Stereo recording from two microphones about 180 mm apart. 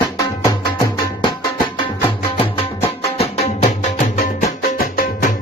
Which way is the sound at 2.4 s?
35° left (ahead or behind).